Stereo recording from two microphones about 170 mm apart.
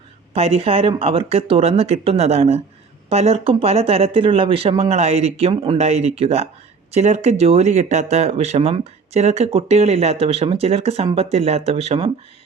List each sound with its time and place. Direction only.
0.3 s speech: 35° right (ahead or behind)